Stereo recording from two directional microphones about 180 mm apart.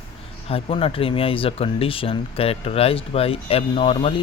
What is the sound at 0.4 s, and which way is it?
Speech, 30° left (ahead or behind).